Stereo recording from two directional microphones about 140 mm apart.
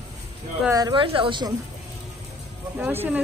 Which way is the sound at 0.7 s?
30° right (ahead or behind).